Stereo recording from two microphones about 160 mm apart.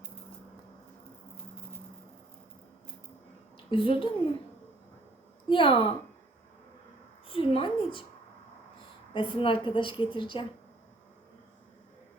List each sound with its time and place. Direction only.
3.7 s a woman's voice: 30° left (ahead or behind)
5.5 s a woman's voice: 35° left (ahead or behind)
7.3 s a woman's voice: 35° left (ahead or behind)
9.1 s a woman's voice: 30° left (ahead or behind)